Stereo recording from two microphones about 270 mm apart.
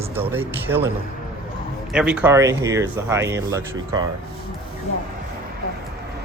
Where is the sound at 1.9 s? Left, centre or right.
Centre.